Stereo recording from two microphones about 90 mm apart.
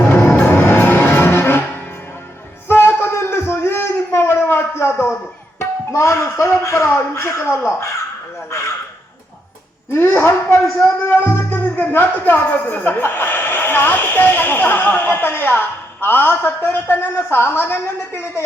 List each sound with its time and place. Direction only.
0.0 s music: 20° left (ahead or behind)
2.6 s a sound: 25° left (ahead or behind)
5.5 s music: 30° left (ahead or behind)
7.6 s speech: 30° left (ahead or behind)
9.9 s speech: 25° left (ahead or behind)